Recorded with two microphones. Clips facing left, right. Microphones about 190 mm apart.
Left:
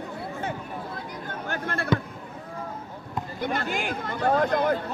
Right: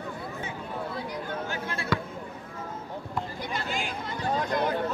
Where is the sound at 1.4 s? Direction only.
55° left (ahead or behind).